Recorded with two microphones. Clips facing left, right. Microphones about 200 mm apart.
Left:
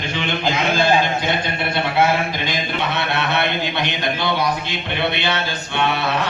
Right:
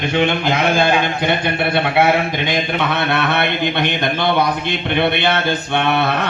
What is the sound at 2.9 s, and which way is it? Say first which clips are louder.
Mantra: right 3 dB; 55° right (ahead or behind).